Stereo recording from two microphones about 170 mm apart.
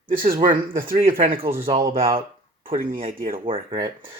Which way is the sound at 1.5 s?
15° right (ahead or behind).